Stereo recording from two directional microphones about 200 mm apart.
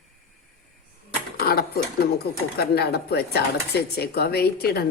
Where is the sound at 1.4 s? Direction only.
50° left (ahead or behind).